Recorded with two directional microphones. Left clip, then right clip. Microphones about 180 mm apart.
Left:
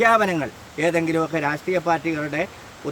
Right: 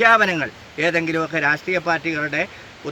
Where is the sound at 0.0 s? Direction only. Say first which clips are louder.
Right 3 dB; 10° left (ahead or behind).